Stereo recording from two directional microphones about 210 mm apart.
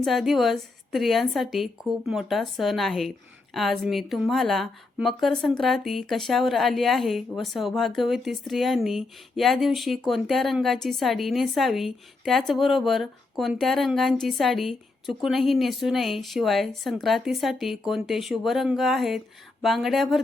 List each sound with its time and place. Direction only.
0.0 s a woman's voice: centre (ahead or behind)